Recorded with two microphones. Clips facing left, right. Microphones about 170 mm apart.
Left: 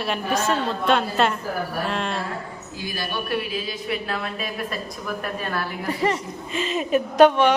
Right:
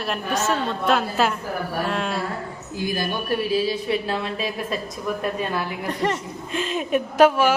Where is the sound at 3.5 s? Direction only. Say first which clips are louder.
Right 6 dB; 30° right (ahead or behind).